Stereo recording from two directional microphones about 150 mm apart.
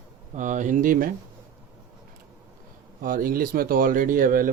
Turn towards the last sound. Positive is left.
turn(degrees=-65)  # may be behind; listen again after turning